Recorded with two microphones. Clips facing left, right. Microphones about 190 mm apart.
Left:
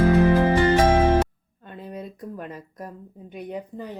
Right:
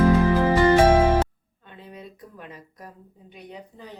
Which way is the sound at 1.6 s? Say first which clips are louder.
Left 6 dB; 45° left (ahead or behind).